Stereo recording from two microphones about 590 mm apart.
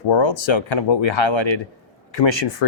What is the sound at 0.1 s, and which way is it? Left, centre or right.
Speech, left.